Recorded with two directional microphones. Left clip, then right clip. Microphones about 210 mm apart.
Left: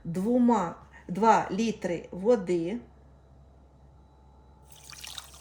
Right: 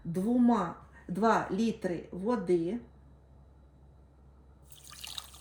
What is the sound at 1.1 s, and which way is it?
Speech, 30° left (ahead or behind).